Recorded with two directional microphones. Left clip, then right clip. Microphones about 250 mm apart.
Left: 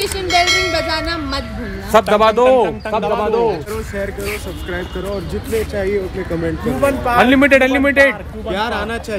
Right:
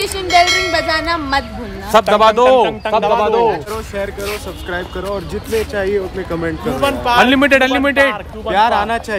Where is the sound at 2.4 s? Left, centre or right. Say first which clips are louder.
Right 2 dB; centre.